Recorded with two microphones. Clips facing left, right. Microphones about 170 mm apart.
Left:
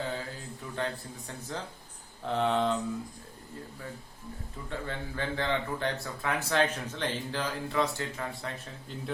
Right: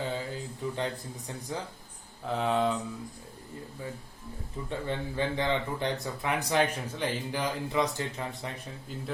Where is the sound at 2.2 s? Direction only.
5° right (ahead or behind).